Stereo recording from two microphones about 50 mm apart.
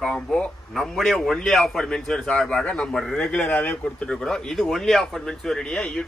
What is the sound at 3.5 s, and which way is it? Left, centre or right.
Speech, left.